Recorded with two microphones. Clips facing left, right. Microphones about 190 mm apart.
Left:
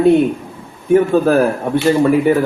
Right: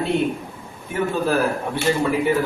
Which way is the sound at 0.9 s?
45° left (ahead or behind).